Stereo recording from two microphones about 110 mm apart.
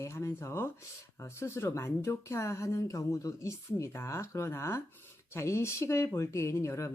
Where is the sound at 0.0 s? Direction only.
25° left (ahead or behind).